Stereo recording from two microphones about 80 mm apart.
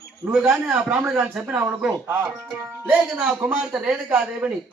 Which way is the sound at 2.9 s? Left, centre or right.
Centre.